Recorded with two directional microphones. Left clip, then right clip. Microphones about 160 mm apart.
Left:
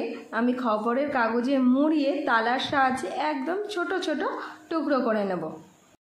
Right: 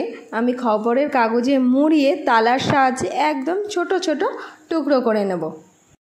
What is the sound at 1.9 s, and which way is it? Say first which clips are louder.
A woman's voice: right 8 dB; 45° right (ahead or behind).